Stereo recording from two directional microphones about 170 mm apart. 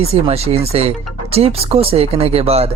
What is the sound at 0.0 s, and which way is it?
Speech, 35° right (ahead or behind).